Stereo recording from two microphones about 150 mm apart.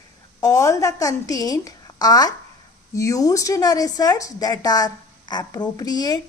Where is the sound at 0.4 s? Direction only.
25° left (ahead or behind).